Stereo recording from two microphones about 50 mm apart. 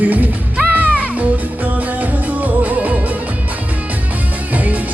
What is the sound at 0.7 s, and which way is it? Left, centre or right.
Music, right.